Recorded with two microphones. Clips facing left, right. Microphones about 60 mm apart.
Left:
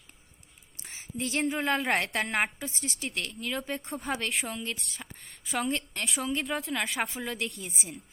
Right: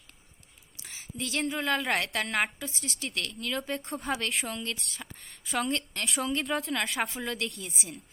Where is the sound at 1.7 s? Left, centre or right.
Centre.